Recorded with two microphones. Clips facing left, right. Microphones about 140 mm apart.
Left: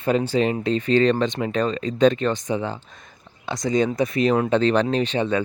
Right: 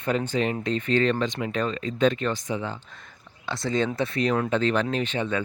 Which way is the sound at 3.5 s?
15° left (ahead or behind).